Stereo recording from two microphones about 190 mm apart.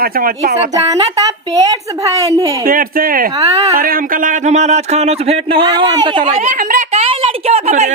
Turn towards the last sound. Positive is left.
turn(degrees=-35)  # may be behind; listen again after turning